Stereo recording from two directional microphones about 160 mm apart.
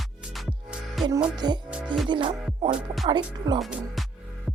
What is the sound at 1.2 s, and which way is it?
Speech, 25° right (ahead or behind).